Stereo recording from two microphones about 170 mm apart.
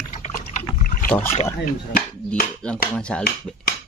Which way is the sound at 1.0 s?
10° left (ahead or behind).